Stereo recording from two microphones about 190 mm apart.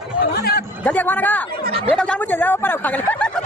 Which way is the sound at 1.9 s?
10° left (ahead or behind).